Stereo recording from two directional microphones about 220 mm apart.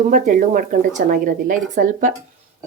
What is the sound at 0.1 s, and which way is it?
Speech, 35° right (ahead or behind).